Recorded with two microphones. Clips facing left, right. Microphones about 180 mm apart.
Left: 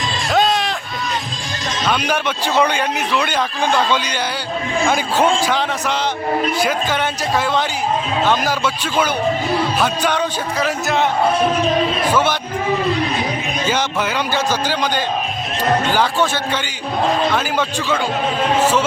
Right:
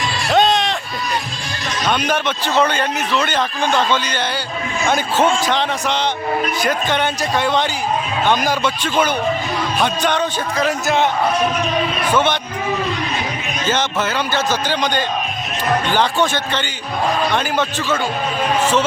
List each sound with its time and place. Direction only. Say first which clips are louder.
0.3 s music: right 2 dB; centre (ahead or behind)
1.8 s a man's voice: right 1 dB; 5° left (ahead or behind)
4.9 s a man's voice: right 1 dB; 10° left (ahead or behind)
11.3 s speech: left 2 dB; 30° left (ahead or behind)
12.1 s a man's voice: right 2 dB; 5° left (ahead or behind)
13.7 s a man's voice: right 1 dB; 10° left (ahead or behind)